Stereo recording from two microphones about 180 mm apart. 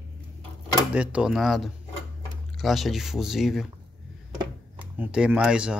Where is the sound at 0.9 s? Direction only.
5° right (ahead or behind).